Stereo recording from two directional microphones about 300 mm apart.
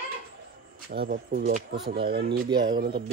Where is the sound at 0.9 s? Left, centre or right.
Right.